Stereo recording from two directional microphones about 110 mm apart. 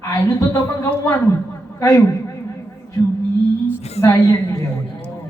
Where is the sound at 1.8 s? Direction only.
30° left (ahead or behind).